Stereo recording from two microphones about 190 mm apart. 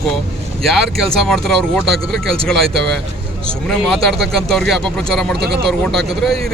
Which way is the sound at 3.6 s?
Centre (ahead or behind).